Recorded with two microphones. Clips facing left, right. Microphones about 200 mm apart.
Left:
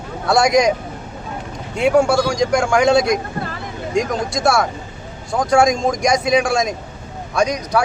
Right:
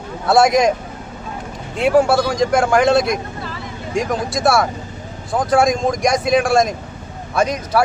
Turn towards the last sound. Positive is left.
turn(degrees=-5)  # may be behind; listen again after turning